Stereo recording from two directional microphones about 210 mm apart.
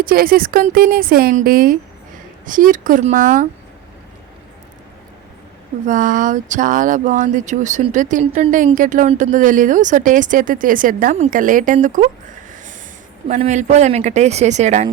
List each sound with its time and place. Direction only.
0.0 s speech: 45° right (ahead or behind)
5.8 s speech: 40° right (ahead or behind)
13.2 s speech: 35° right (ahead or behind)